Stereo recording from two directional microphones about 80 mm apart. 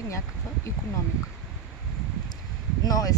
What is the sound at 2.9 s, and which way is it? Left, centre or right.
Speech, left.